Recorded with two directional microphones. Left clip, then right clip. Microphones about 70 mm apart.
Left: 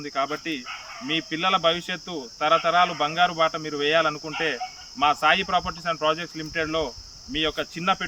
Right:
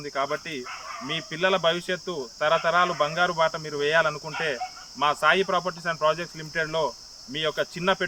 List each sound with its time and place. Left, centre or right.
0.0 s speech: centre